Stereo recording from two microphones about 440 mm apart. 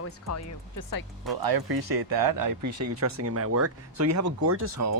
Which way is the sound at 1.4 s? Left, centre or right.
Right.